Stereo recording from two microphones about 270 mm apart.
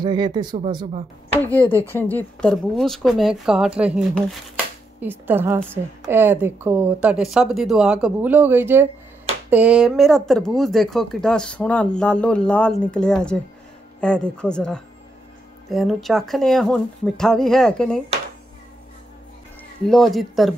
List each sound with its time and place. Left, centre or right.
0.0 s speech: centre
1.4 s speech: centre
19.9 s speech: centre